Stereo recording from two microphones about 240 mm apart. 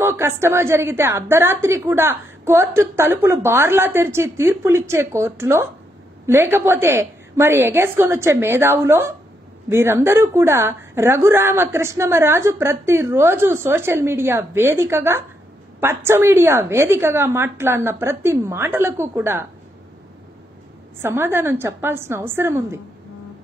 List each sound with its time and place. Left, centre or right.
0.0 s a woman's voice: centre
21.0 s a woman's voice: centre